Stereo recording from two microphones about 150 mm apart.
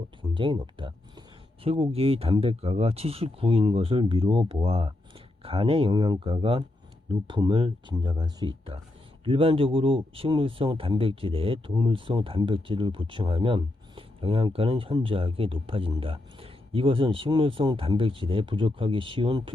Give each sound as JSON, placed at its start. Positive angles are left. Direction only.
{"t": 0.2, "sound": "speech", "side_deg": -35}